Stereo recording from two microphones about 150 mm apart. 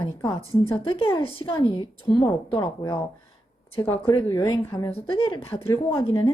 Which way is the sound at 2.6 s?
20° left (ahead or behind).